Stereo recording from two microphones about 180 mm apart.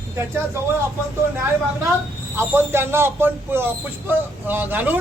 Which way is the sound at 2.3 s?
15° right (ahead or behind).